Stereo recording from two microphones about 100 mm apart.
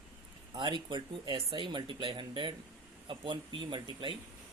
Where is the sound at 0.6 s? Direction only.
50° right (ahead or behind).